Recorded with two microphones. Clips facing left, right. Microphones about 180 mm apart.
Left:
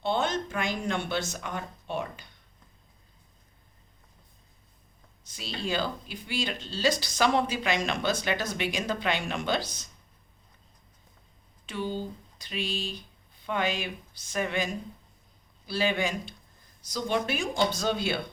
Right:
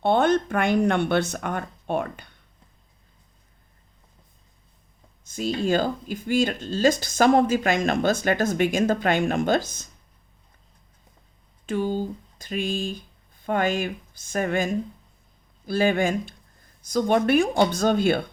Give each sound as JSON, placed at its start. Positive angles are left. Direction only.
{"t": 0.0, "sound": "speech", "side_deg": -55}
{"t": 5.2, "sound": "speech", "side_deg": -50}
{"t": 11.6, "sound": "speech", "side_deg": -45}